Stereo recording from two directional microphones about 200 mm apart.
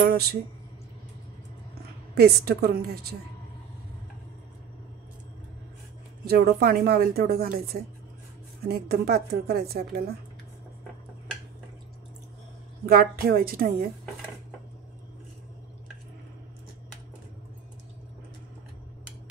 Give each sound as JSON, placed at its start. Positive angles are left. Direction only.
{"t": 0.0, "sound": "speech", "side_deg": -50}
{"t": 2.1, "sound": "speech", "side_deg": -50}
{"t": 6.2, "sound": "speech", "side_deg": -50}
{"t": 12.8, "sound": "speech", "side_deg": -50}